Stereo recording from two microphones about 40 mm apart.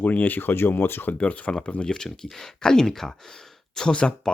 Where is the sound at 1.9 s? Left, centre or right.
Centre.